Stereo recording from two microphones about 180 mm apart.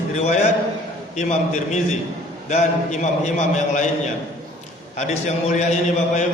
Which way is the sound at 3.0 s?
40° left (ahead or behind).